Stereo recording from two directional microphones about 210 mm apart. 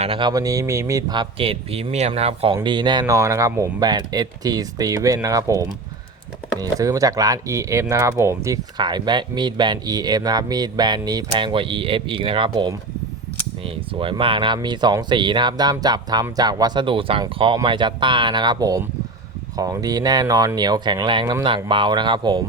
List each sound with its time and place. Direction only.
0.0 s speech: 25° right (ahead or behind)